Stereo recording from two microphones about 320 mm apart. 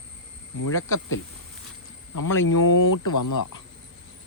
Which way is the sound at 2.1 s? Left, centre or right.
Left.